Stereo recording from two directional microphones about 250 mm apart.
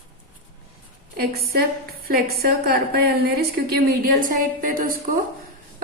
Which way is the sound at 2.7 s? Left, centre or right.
Right.